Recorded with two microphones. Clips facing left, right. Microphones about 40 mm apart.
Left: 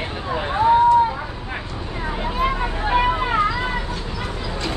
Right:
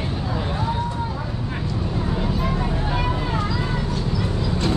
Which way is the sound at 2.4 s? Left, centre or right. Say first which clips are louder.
Left 3 dB; left.